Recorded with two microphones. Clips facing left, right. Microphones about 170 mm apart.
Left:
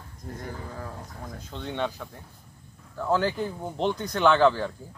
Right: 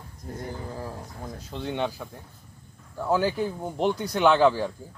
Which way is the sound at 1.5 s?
10° right (ahead or behind).